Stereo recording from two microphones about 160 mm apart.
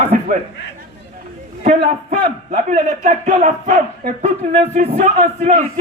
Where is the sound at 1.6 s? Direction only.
50° right (ahead or behind).